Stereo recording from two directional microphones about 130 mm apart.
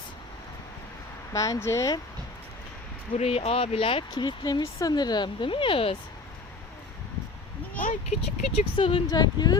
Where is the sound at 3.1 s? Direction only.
50° left (ahead or behind).